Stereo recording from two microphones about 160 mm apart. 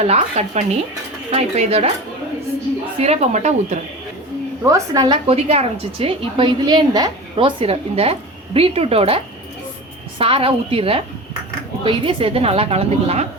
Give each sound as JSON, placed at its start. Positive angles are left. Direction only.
{"t": 0.0, "sound": "a woman's voice", "side_deg": -40}
{"t": 3.0, "sound": "speech", "side_deg": -40}
{"t": 4.6, "sound": "a woman's voice", "side_deg": -20}
{"t": 5.2, "sound": "a woman's voice", "side_deg": -40}